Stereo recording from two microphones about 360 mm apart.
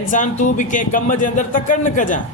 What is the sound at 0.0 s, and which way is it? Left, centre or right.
Speech, left.